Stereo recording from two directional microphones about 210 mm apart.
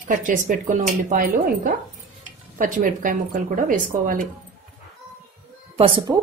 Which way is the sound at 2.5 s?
40° right (ahead or behind).